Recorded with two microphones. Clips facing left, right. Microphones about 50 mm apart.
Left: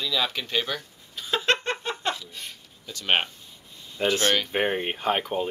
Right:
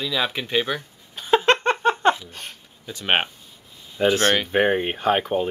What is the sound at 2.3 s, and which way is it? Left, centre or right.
Speech, right.